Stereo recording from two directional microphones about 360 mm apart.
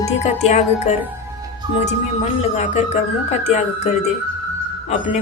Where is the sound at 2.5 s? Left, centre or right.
Centre.